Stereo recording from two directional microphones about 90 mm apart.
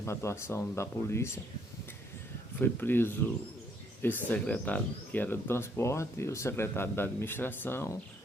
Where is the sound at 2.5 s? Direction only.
25° left (ahead or behind).